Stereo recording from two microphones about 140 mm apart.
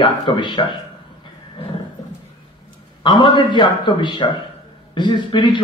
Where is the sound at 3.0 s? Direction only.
35° left (ahead or behind).